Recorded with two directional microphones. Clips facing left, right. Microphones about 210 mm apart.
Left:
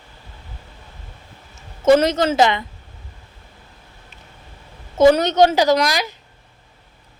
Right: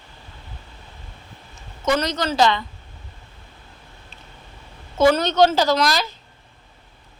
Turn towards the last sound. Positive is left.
turn(degrees=15)  # may be behind; listen again after turning